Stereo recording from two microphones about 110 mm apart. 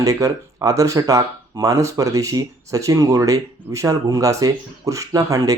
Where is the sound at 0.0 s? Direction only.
30° right (ahead or behind).